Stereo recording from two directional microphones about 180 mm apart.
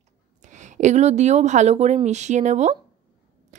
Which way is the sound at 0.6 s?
40° right (ahead or behind).